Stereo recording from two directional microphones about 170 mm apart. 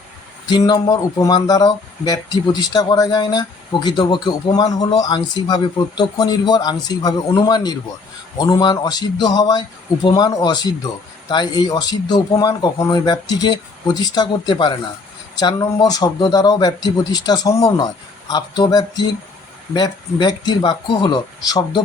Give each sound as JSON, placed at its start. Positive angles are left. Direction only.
{"t": 0.5, "sound": "speech", "side_deg": 25}